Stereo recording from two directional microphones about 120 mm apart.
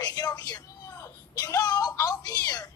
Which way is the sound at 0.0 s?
35° left (ahead or behind).